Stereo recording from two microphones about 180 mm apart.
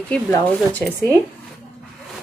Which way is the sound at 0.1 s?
10° left (ahead or behind).